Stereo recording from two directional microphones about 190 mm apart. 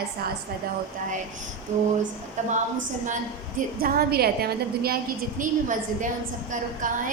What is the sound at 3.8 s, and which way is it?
A woman's voice, 50° right (ahead or behind).